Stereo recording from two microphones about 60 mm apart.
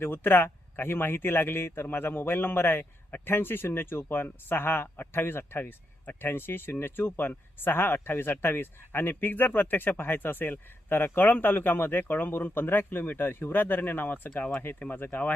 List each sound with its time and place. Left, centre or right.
0.0 s speech: left